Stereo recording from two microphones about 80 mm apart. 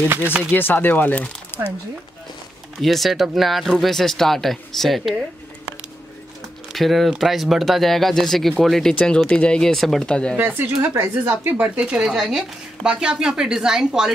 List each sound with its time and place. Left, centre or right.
0.1 s speech: right
0.5 s speech: left
2.8 s speech: centre
6.7 s speech: centre
10.3 s speech: right
11.6 s speech: centre